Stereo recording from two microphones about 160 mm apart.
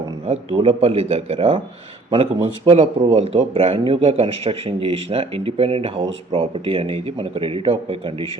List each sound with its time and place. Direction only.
0.3 s a man's voice: 40° right (ahead or behind)